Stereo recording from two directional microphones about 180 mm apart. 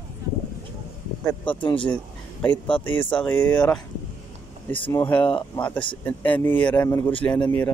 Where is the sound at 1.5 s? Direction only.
30° left (ahead or behind).